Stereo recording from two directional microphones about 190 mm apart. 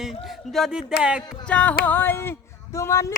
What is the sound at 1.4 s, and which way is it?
Music, 5° left (ahead or behind).